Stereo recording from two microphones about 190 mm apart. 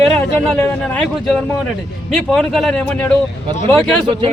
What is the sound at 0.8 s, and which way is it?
Speech, 5° left (ahead or behind).